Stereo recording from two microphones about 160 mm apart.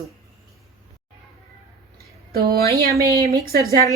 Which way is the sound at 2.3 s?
75° right (ahead or behind).